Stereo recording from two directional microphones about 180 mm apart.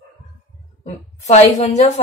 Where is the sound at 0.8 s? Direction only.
40° left (ahead or behind).